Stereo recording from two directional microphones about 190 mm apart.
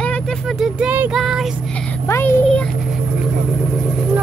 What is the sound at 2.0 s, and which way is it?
Speech, 10° left (ahead or behind).